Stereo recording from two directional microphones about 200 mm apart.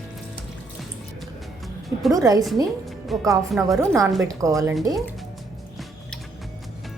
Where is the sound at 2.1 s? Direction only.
15° right (ahead or behind).